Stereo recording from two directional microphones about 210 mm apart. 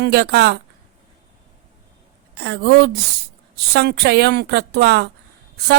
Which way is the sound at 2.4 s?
50° right (ahead or behind).